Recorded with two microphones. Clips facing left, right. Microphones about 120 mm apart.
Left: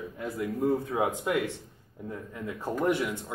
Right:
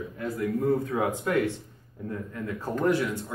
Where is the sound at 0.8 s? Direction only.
15° left (ahead or behind).